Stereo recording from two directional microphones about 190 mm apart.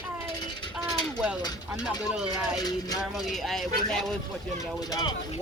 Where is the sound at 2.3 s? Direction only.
20° left (ahead or behind).